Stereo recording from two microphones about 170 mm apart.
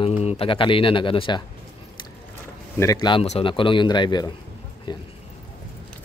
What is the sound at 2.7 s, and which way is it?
Speech, 20° left (ahead or behind).